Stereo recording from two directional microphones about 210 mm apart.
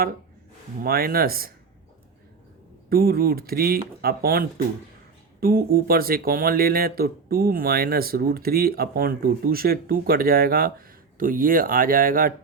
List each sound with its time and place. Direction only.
0.8 s speech: 45° right (ahead or behind)
2.9 s speech: 45° right (ahead or behind)